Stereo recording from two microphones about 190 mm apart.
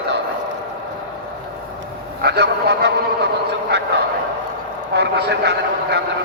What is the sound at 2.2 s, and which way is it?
Speech, 60° right (ahead or behind).